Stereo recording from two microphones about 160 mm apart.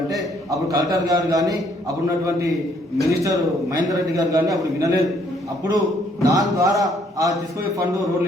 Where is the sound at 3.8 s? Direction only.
20° right (ahead or behind).